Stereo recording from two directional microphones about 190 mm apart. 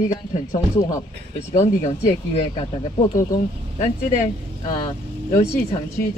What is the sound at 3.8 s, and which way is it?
Speech, 40° left (ahead or behind).